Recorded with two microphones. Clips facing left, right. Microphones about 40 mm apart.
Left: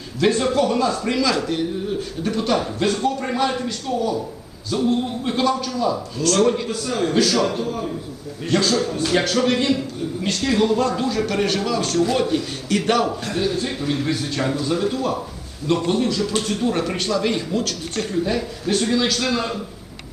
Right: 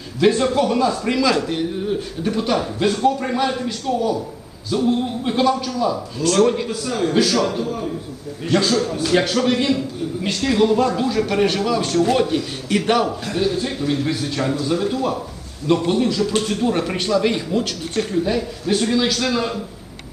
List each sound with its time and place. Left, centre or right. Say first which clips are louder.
0.2 s a man's voice: right 2 dB; centre
2.2 s a man's voice: even; centre
12.6 s speech: right 2 dB; centre
13.1 s a man's voice: right 1 dB; centre
15.9 s a man's voice: right 2 dB; centre
18.1 s a man's voice: even; centre